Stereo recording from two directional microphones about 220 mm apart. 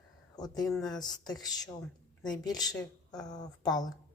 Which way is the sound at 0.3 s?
15° left (ahead or behind).